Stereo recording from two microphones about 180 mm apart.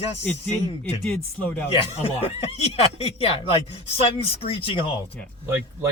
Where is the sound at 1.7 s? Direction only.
35° left (ahead or behind).